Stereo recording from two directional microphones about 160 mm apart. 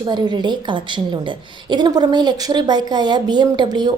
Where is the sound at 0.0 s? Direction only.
30° right (ahead or behind).